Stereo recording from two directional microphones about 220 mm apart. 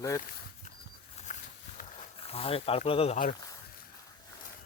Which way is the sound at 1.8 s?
25° left (ahead or behind).